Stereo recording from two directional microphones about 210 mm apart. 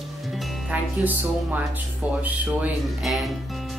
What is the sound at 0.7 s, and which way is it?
Speech, 10° right (ahead or behind).